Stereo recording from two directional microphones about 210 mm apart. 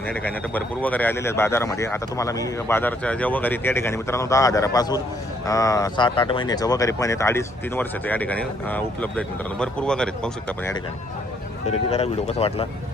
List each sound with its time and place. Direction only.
0.1 s speech: 10° left (ahead or behind)
11.9 s speech: 30° left (ahead or behind)